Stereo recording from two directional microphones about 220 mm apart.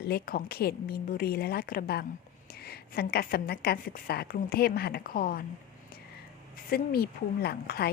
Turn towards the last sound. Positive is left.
turn(degrees=45)  # may be behind; listen again after turning